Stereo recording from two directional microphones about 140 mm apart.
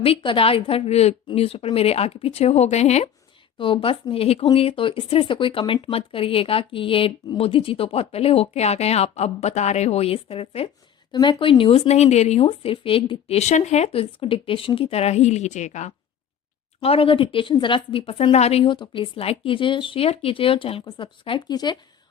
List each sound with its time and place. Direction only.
0.0 s speech: 40° left (ahead or behind)
3.6 s a woman's voice: 40° left (ahead or behind); by 15.9 s 55° left (ahead or behind)
16.8 s a woman's voice: 45° left (ahead or behind)